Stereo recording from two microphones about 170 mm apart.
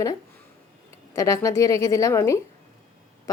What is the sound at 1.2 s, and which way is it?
A woman's voice, 20° left (ahead or behind).